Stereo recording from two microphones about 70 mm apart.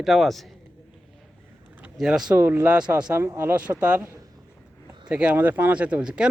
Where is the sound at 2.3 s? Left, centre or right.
Right.